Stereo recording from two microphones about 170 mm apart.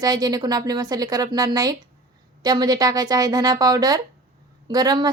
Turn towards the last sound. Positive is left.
turn(degrees=-25)  # may be behind; listen again after turning